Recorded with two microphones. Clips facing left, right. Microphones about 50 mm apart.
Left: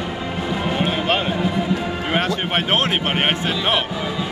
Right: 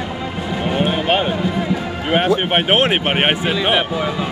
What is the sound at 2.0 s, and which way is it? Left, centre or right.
A man's voice, right.